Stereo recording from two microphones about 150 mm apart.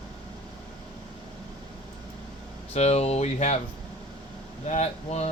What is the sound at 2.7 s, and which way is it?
Speech, 45° left (ahead or behind).